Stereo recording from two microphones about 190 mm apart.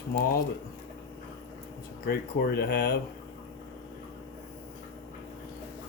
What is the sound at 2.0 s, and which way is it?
Speech, 50° left (ahead or behind).